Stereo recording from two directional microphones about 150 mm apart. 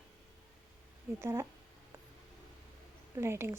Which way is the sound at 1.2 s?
20° right (ahead or behind).